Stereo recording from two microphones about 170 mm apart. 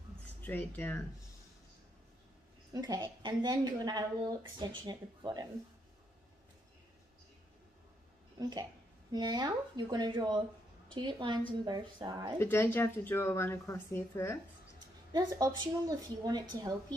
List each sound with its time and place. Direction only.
0.4 s speech: 10° left (ahead or behind)
2.7 s a woman's voice: 25° right (ahead or behind)
8.4 s a woman's voice: 20° right (ahead or behind)
12.4 s speech: 10° left (ahead or behind)
15.1 s a woman's voice: 25° right (ahead or behind)